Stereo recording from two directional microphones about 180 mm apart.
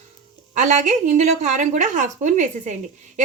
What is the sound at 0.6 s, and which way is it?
Speech, 40° right (ahead or behind).